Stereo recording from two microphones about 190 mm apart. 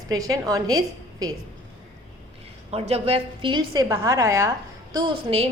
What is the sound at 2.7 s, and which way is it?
A woman's voice, 35° right (ahead or behind).